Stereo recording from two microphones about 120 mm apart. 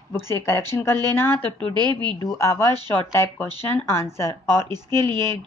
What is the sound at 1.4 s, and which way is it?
Speech, 40° right (ahead or behind).